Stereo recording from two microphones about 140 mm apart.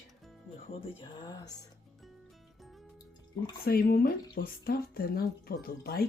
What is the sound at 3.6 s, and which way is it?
Speech, 90° left.